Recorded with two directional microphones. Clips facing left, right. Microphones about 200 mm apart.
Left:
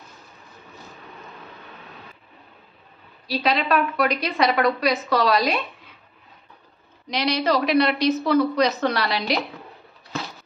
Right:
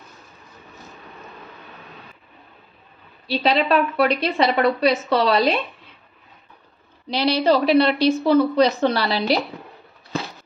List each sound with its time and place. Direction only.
3.3 s a woman's voice: 30° right (ahead or behind)
7.1 s a woman's voice: 30° right (ahead or behind)